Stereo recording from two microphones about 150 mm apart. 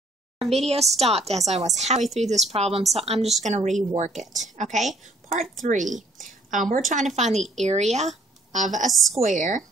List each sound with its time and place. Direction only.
0.4 s a woman's voice: 45° right (ahead or behind)
8.9 s a woman's voice: centre (ahead or behind)
9.2 s a woman's voice: 60° right (ahead or behind)